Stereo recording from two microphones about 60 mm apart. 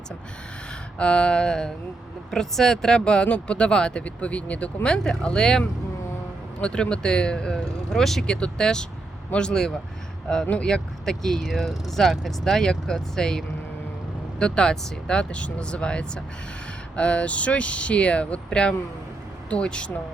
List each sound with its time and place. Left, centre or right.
0.9 s speech: centre
10.4 s speech: left
10.7 s speech: centre